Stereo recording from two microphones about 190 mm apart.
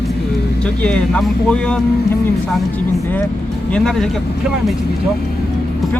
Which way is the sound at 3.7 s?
5° left (ahead or behind).